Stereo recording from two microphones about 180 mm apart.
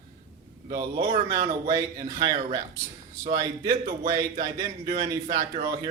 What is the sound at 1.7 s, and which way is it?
Speech, 20° right (ahead or behind).